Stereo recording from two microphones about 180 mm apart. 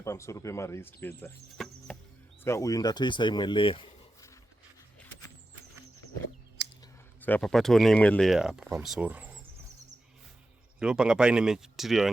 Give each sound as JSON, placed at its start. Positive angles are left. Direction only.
{"t": 0.0, "sound": "speech", "side_deg": 15}
{"t": 1.5, "sound": "chop", "side_deg": 0}
{"t": 2.4, "sound": "speech", "side_deg": 15}
{"t": 7.2, "sound": "speech", "side_deg": 10}
{"t": 10.8, "sound": "speech", "side_deg": -5}